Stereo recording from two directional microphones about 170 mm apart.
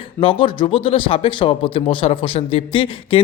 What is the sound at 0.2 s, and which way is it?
Speech, 30° left (ahead or behind).